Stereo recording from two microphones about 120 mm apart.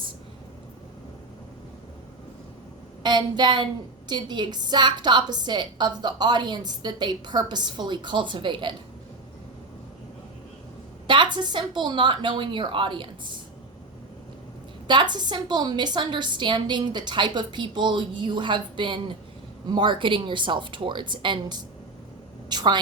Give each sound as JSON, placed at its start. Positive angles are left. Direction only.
{"t": 3.0, "sound": "a woman's voice", "side_deg": -35}
{"t": 11.0, "sound": "a woman's voice", "side_deg": -40}
{"t": 14.8, "sound": "a woman's voice", "side_deg": -40}
{"t": 22.4, "sound": "a sound", "side_deg": -35}